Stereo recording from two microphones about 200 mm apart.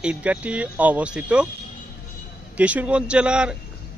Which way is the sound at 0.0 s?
5° right (ahead or behind).